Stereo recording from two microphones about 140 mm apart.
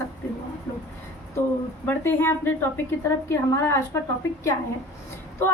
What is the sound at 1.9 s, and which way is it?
A woman's voice, 15° left (ahead or behind).